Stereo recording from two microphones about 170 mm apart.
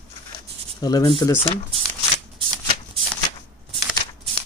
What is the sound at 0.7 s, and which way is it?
Speech, 25° left (ahead or behind).